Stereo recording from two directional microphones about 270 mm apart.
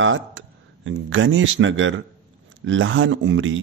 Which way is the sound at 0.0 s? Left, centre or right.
Right.